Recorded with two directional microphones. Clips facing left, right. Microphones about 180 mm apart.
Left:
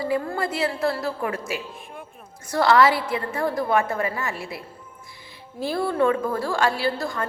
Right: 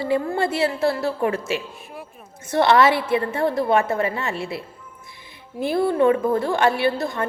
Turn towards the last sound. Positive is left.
turn(degrees=-20)  # may be behind; listen again after turning